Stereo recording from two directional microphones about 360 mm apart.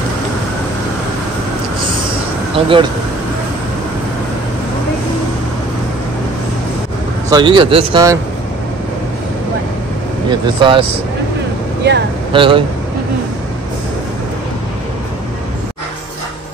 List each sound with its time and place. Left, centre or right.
2.5 s speech: centre
7.2 s speech: centre
10.4 s speech: centre
11.9 s speech: right
12.3 s speech: centre